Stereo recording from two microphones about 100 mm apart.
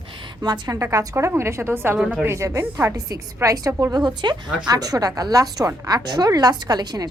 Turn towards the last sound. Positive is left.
turn(degrees=-40)  # may be behind; listen again after turning